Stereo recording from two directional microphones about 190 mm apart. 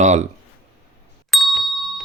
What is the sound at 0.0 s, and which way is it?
Speech, 35° right (ahead or behind).